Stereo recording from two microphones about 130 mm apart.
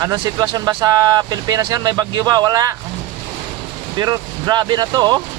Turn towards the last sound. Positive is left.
turn(degrees=-30)  # may be behind; listen again after turning